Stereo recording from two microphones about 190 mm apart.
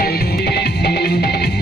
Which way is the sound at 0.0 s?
55° left (ahead or behind).